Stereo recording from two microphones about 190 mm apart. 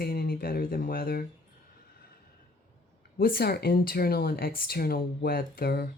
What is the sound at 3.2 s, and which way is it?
Speech, 55° left (ahead or behind).